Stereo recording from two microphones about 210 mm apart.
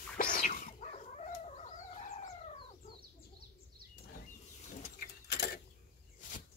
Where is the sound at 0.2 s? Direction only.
40° left (ahead or behind).